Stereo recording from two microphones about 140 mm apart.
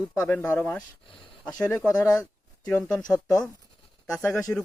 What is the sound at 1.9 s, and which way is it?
Speech, 25° left (ahead or behind).